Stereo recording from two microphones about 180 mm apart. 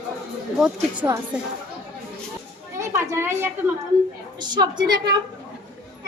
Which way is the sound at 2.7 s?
15° right (ahead or behind).